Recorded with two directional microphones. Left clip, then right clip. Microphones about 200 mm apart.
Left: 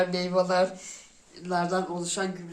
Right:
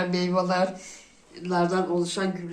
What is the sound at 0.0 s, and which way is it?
Speech, 45° left (ahead or behind).